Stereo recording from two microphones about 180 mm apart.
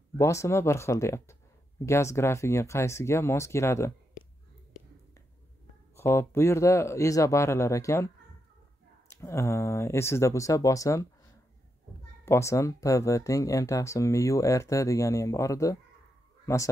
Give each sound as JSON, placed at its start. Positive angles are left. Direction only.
{"t": 0.2, "sound": "speech", "side_deg": 15}
{"t": 5.9, "sound": "speech", "side_deg": 15}
{"t": 12.3, "sound": "speech", "side_deg": 15}